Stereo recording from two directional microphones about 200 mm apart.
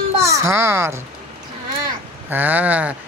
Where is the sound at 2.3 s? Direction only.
10° right (ahead or behind).